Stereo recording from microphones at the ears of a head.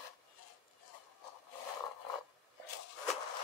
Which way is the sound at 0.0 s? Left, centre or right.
Left.